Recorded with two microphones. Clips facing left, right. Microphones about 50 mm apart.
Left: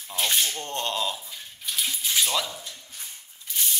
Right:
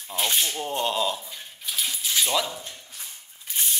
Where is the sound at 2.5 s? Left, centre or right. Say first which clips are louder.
Right 2 dB; right.